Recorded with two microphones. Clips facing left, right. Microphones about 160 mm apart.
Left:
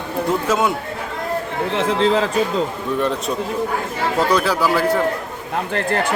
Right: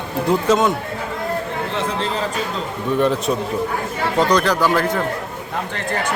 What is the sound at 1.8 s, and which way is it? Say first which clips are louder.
Speech: left 8 dB; 90° left.